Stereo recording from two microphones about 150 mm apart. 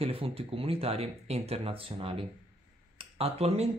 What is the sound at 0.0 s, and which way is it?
Speech, 40° right (ahead or behind).